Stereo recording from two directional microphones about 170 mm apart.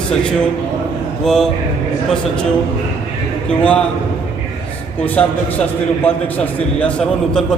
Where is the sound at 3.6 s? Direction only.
5° left (ahead or behind).